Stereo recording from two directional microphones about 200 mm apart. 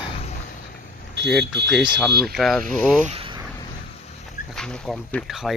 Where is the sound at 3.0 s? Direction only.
30° right (ahead or behind).